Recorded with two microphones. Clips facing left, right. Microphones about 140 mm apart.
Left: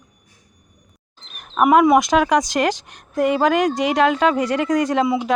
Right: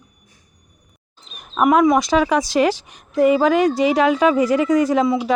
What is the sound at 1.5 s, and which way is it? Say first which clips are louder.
A woman's voice: left 1 dB; 5° left (ahead or behind).